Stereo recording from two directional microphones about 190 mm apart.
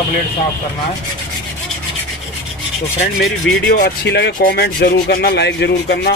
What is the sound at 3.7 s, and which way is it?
Rub, 60° left (ahead or behind).